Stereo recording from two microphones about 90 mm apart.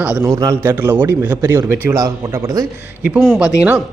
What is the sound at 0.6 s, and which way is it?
A man's voice, 25° right (ahead or behind).